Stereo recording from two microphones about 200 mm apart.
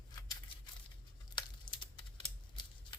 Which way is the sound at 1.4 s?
25° left (ahead or behind).